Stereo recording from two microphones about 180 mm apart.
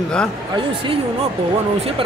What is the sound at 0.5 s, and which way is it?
Speech, 30° right (ahead or behind).